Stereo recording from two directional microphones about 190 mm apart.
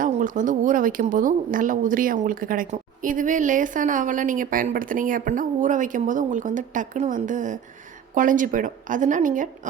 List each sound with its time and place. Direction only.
0.0 s speech: 45° right (ahead or behind)